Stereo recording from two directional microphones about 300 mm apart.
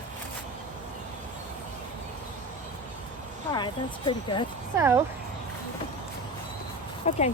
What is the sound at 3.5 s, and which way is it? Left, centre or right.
Speech, centre.